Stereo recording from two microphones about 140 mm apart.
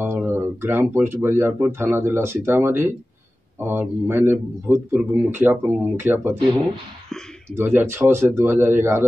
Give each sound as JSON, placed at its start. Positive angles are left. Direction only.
{"t": 0.0, "sound": "a man's voice", "side_deg": -15}
{"t": 7.5, "sound": "a man's voice", "side_deg": -15}